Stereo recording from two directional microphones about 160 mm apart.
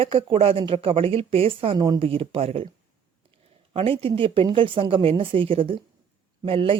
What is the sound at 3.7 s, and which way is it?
Speech, 35° right (ahead or behind).